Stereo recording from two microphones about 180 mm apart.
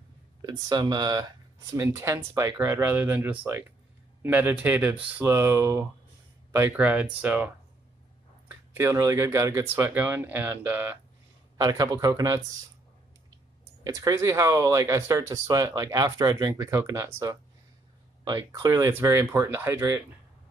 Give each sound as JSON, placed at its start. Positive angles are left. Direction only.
{"t": 0.4, "sound": "speech", "side_deg": -20}
{"t": 11.5, "sound": "speech", "side_deg": -20}
{"t": 13.8, "sound": "speech", "side_deg": -20}